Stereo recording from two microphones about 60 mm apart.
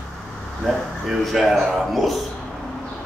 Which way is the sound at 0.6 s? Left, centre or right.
Centre.